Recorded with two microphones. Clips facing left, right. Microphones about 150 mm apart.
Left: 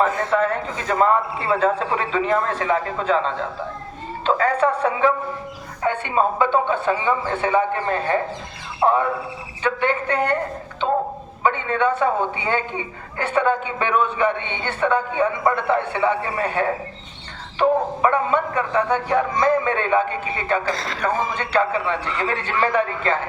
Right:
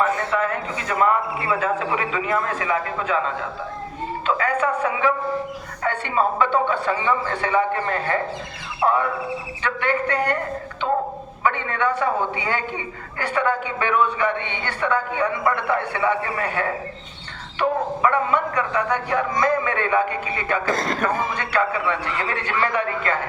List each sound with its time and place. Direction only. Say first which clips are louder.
0.0 s a man's voice: left 2 dB; 30° left (ahead or behind)
5.8 s a man's voice: left 2 dB; 20° left (ahead or behind)
11.4 s a man's voice: left 2 dB; 25° left (ahead or behind)
20.7 s speech: right 2 dB; 50° right (ahead or behind)
21.3 s a man's voice: left 2 dB; 30° left (ahead or behind)